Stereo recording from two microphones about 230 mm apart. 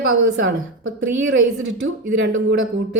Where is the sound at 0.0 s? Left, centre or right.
Right.